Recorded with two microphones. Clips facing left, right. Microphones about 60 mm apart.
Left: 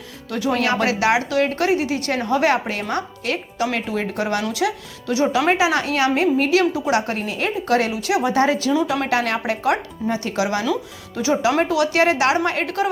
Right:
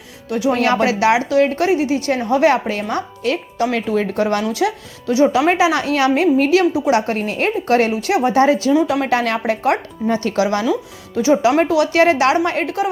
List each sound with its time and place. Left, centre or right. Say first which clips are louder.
0.3 s speech: right 5 dB; centre
0.5 s a woman's voice: right 3 dB; right
3.2 s speech: right 5 dB; right
5.1 s a woman's voice: right 4 dB; right
5.7 s a woman's voice: right 2 dB; left
6.0 s speech: right 4 dB; right
7.1 s speech: right 4 dB; right
11.2 s a woman's voice: right 5 dB; right